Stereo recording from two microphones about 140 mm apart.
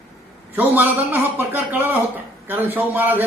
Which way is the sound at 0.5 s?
15° right (ahead or behind).